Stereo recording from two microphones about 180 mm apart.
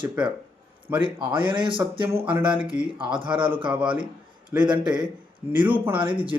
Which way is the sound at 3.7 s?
5° right (ahead or behind).